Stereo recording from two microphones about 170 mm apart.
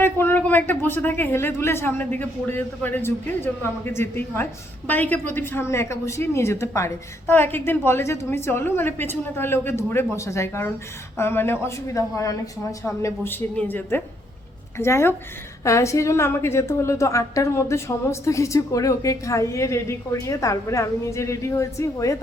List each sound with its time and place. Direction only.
0.0 s a woman's voice: 10° left (ahead or behind)